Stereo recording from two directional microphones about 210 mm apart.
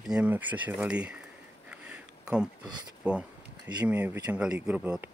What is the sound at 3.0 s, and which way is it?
Speech, 5° right (ahead or behind).